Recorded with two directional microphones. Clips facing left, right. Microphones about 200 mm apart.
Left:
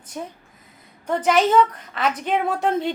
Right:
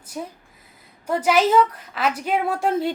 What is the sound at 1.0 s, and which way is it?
A woman's voice, 5° right (ahead or behind).